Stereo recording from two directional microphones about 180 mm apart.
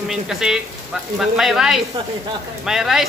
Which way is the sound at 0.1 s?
5° right (ahead or behind).